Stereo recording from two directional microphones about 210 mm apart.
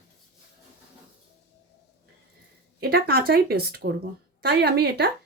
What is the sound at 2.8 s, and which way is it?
Speech, 45° right (ahead or behind).